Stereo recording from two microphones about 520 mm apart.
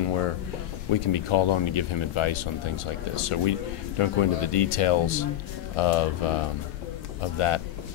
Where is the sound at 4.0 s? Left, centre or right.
Left.